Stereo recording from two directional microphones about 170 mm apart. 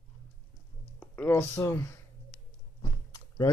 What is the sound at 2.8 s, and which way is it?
Chewing, 20° left (ahead or behind).